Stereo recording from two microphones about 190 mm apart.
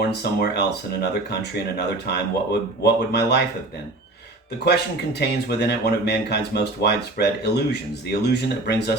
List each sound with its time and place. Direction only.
0.1 s speech: 60° left (ahead or behind)
4.6 s speech: 60° left (ahead or behind)